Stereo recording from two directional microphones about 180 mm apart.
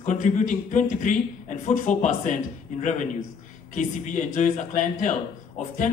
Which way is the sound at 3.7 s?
45° left (ahead or behind).